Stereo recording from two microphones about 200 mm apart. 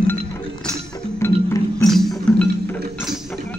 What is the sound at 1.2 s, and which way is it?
Music, 10° left (ahead or behind).